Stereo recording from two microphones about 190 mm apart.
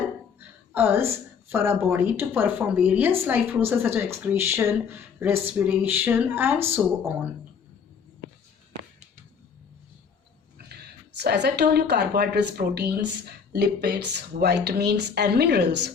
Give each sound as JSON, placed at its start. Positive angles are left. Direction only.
{"t": 0.3, "sound": "speech", "side_deg": -10}
{"t": 11.2, "sound": "speech", "side_deg": -60}